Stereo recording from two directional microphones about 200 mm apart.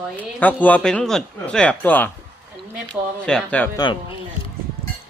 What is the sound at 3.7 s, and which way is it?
Speech, 25° left (ahead or behind).